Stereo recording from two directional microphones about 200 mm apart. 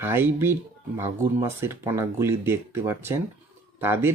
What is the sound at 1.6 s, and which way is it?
Speech, 10° right (ahead or behind).